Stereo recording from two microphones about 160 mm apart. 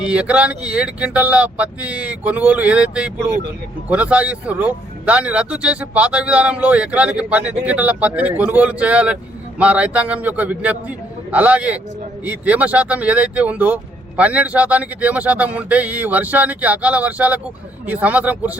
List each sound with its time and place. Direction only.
0.0 s a man's voice: 5° right (ahead or behind)